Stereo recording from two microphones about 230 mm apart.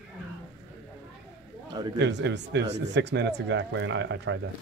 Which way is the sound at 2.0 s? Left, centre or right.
Right.